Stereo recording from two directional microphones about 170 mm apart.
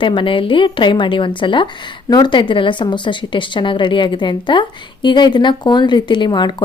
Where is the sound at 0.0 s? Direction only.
30° left (ahead or behind).